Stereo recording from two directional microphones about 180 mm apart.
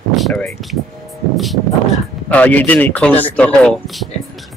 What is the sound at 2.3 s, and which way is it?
A man's voice, 10° left (ahead or behind).